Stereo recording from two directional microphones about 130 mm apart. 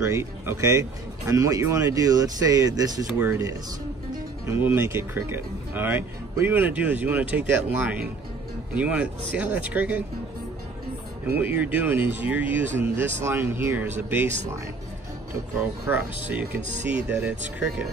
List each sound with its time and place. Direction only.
0.0 s speech: 20° right (ahead or behind)
11.2 s speech: 15° right (ahead or behind)
15.9 s speech: 15° right (ahead or behind)